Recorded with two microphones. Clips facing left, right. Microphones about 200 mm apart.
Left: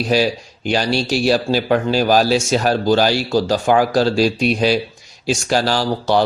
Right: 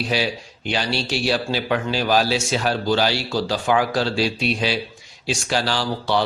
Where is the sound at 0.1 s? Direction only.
40° left (ahead or behind).